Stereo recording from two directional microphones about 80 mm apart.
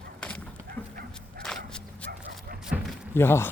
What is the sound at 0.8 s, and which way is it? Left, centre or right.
Dog, centre.